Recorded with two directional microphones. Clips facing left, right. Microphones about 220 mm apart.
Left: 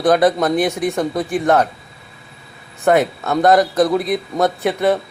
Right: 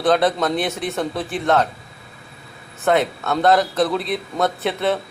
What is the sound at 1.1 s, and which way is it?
Speech, 15° left (ahead or behind).